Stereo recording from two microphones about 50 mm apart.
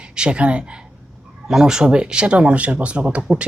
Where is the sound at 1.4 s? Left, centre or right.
Centre.